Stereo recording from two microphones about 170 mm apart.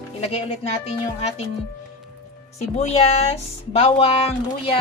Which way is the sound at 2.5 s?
40° left (ahead or behind).